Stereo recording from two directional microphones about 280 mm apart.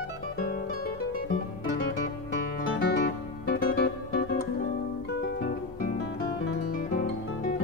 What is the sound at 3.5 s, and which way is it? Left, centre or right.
Music, left.